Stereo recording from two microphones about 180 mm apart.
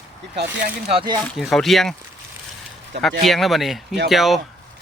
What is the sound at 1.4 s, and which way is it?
Speech, centre (ahead or behind).